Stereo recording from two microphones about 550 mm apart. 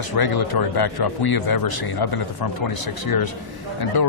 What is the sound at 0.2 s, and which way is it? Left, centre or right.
Speech, left.